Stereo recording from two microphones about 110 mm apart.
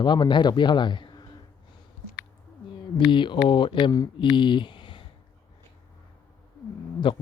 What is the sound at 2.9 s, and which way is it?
Speech, 45° left (ahead or behind).